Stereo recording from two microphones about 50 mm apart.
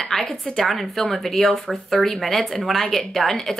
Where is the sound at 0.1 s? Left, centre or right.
Centre.